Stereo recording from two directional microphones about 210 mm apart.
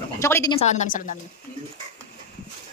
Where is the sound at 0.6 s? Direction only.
35° left (ahead or behind).